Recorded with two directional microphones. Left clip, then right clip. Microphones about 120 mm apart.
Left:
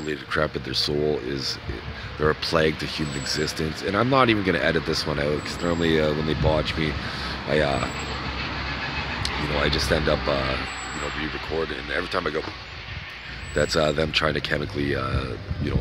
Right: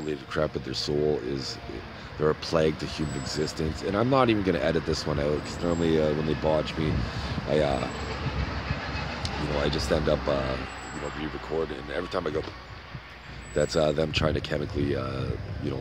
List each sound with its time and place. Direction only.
0.1 s speech: 10° right (ahead or behind)
9.2 s speech: 10° right (ahead or behind)
10.4 s speech: 90° right
11.5 s speech: 5° right (ahead or behind)
13.6 s speech: 10° right (ahead or behind)